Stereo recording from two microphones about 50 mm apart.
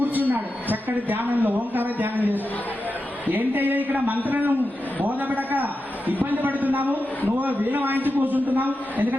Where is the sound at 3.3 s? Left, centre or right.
Right.